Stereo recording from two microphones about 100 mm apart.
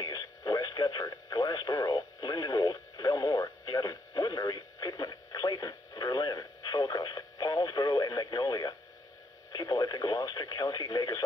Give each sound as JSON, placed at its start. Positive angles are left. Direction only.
{"t": 0.0, "sound": "radio", "side_deg": 40}